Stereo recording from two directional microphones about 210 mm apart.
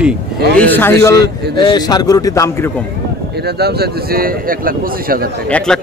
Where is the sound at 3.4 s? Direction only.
50° right (ahead or behind).